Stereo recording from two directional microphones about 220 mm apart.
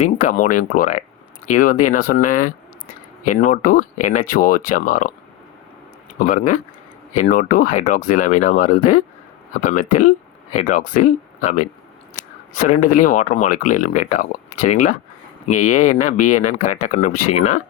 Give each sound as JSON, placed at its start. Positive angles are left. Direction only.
{"t": 0.3, "sound": "speech", "side_deg": 35}
{"t": 6.1, "sound": "speech", "side_deg": 35}
{"t": 15.4, "sound": "speech", "side_deg": 35}